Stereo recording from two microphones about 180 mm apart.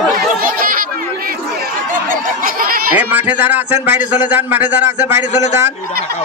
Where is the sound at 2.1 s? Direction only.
50° right (ahead or behind).